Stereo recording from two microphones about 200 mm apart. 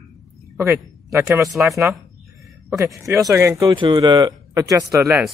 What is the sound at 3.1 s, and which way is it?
Speech, 10° right (ahead or behind).